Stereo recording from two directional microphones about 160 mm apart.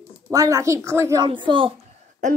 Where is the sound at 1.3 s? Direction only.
30° right (ahead or behind).